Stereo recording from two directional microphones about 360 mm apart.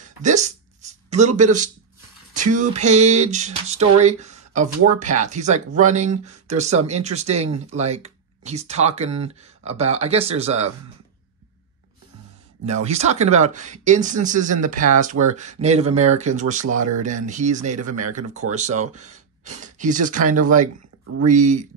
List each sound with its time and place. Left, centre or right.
0.2 s speech: centre
12.8 s speech: centre
17.7 s speech: right
18.5 s speech: centre